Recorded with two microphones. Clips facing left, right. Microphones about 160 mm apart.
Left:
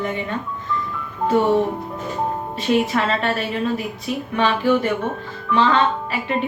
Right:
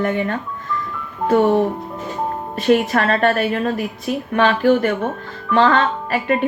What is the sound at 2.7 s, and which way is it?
Speech, 50° right (ahead or behind).